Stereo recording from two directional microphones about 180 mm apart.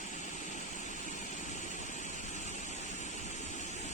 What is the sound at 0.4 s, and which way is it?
Vehicle, 45° left (ahead or behind).